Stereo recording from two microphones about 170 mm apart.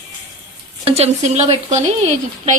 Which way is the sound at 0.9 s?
35° right (ahead or behind).